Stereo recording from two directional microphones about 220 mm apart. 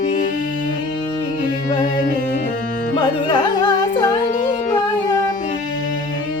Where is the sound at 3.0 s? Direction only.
20° left (ahead or behind).